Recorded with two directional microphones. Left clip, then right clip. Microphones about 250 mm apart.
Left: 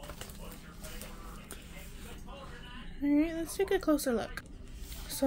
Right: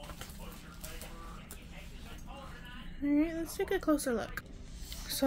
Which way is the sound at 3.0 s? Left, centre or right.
Centre.